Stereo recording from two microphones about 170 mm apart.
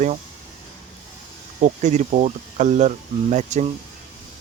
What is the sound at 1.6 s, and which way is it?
Speech, 50° right (ahead or behind).